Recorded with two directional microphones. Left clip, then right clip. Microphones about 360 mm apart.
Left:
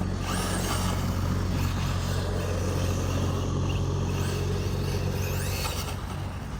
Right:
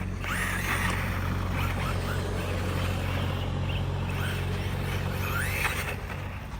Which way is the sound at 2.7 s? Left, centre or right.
Right.